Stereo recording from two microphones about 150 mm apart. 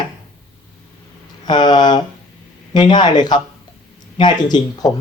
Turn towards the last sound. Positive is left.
turn(degrees=30)  # may be behind; listen again after turning